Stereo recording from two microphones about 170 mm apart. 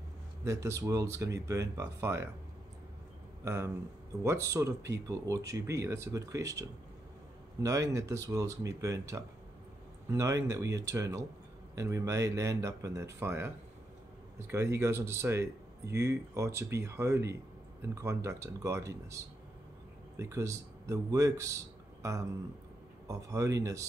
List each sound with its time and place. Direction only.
0.5 s speech: 20° right (ahead or behind)
3.4 s speech: 15° right (ahead or behind)
7.6 s speech: 20° right (ahead or behind)
14.5 s speech: 15° right (ahead or behind)